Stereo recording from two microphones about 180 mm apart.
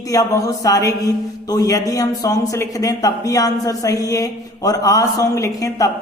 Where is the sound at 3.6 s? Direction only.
20° left (ahead or behind).